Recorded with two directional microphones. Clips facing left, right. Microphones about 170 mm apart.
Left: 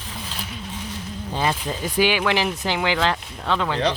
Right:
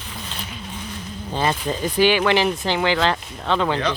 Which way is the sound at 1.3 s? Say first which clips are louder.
Right 2 dB; 5° left (ahead or behind).